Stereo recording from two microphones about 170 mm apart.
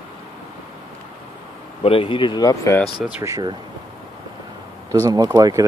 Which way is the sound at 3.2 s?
20° right (ahead or behind).